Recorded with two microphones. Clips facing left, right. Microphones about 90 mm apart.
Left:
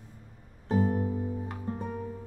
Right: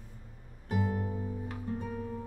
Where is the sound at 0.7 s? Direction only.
35° left (ahead or behind).